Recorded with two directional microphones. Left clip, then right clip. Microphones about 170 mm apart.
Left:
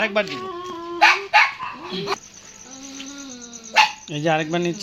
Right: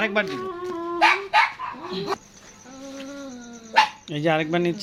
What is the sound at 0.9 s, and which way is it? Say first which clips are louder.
Dog: left 3 dB; 25° right (ahead or behind).